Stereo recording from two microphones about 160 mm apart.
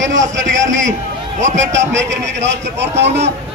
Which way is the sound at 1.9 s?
90° right.